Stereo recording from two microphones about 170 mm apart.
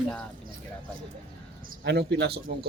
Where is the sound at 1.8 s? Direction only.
80° right.